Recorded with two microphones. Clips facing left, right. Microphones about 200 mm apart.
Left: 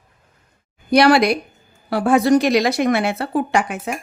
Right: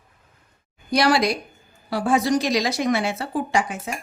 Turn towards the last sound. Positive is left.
turn(degrees=65)  # may be behind; listen again after turning